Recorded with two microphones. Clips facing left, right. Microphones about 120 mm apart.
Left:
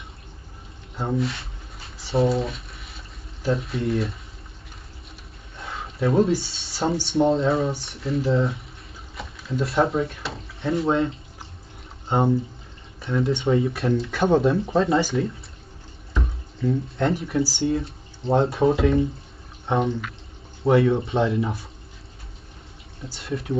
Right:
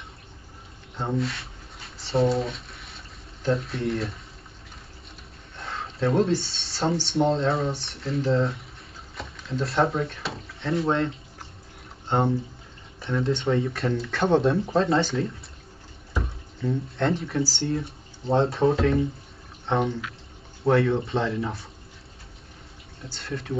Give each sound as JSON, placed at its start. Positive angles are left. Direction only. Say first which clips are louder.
{"t": 0.9, "sound": "a sound", "louder": "left 2 dB", "side_deg": 0}
{"t": 3.4, "sound": "speech", "louder": "left 1 dB", "side_deg": 0}
{"t": 5.6, "sound": "speech", "louder": "left 1 dB", "side_deg": 0}
{"t": 12.1, "sound": "speech", "louder": "left 3 dB", "side_deg": 0}
{"t": 23.0, "sound": "speech", "louder": "left 4 dB", "side_deg": 0}